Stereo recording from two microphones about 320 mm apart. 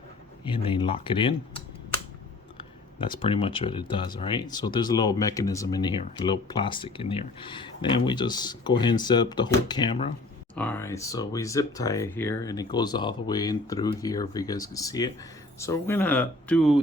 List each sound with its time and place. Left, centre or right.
0.4 s speech: centre